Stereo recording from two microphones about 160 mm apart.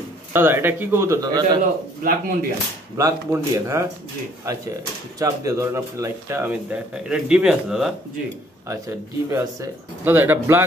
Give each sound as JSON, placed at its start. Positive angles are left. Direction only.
{"t": 0.3, "sound": "speech", "side_deg": -15}
{"t": 1.6, "sound": "a man's voice", "side_deg": -60}
{"t": 3.0, "sound": "speech", "side_deg": -20}
{"t": 5.2, "sound": "speech", "side_deg": -20}
{"t": 8.6, "sound": "speech", "side_deg": -20}